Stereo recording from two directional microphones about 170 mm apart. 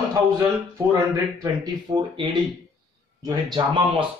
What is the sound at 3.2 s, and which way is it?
Speech, 25° right (ahead or behind).